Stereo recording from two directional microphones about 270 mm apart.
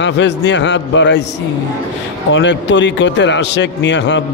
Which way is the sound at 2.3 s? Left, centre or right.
Left.